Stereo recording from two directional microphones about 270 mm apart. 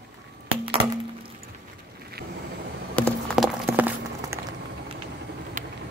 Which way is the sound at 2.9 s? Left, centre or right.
Centre.